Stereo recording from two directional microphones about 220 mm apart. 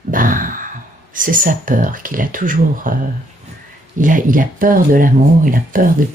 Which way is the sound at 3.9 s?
35° right (ahead or behind).